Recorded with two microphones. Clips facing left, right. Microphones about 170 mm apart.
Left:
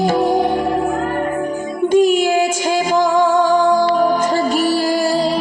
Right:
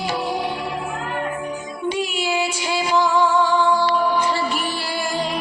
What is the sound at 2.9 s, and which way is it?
Music, 45° left (ahead or behind).